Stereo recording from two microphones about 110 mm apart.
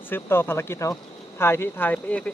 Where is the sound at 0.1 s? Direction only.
20° left (ahead or behind).